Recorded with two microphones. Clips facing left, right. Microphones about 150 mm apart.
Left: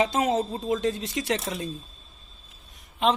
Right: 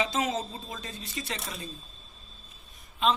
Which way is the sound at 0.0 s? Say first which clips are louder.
Left 6 dB; 60° left (ahead or behind).